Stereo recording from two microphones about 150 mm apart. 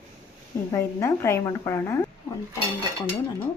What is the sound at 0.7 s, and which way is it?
A woman's voice, 15° left (ahead or behind).